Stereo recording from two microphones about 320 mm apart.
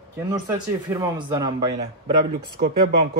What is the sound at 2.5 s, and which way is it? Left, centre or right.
Speech, right.